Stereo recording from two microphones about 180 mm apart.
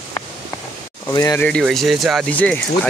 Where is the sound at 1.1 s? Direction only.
20° left (ahead or behind).